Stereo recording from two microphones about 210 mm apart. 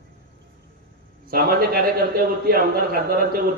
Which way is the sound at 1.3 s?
45° right (ahead or behind).